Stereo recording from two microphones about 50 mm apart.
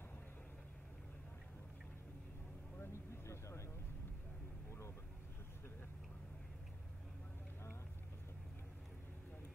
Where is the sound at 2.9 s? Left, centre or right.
Left.